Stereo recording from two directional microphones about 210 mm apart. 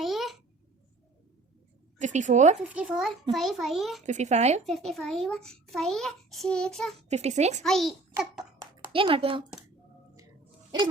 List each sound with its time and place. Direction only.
0.0 s a sound: centre (ahead or behind)
2.0 s a child's voice: 35° right (ahead or behind)
2.6 s a child's voice: 5° right (ahead or behind)
4.0 s a child's voice: 35° right (ahead or behind)
4.6 s a child's voice: centre (ahead or behind)
6.9 s a child's voice: 30° right (ahead or behind)
7.6 s a child's voice: centre (ahead or behind)
8.9 s a woman's voice: 25° right (ahead or behind)